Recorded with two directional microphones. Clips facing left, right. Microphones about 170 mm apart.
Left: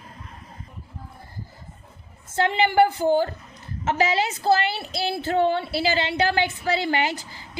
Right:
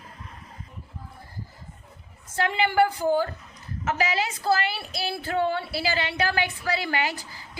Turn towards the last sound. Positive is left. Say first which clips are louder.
# left 3 dB
turn(degrees=20)  # may be behind; listen again after turning